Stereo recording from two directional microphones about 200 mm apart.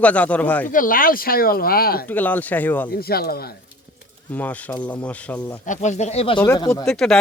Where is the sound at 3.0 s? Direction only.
50° left (ahead or behind).